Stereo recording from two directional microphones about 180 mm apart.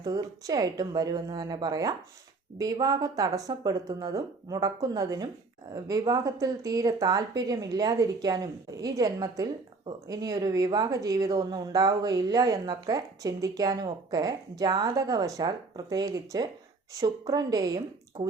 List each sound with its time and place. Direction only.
0.0 s speech: 20° right (ahead or behind)